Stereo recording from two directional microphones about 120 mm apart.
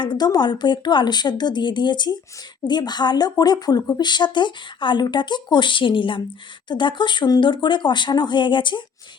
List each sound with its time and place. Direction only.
0.0 s speech: 35° left (ahead or behind)